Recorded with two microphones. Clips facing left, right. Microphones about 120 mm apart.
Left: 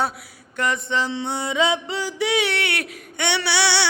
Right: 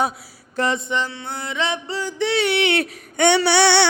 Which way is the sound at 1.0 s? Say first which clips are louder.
Left 4 dB; 20° left (ahead or behind).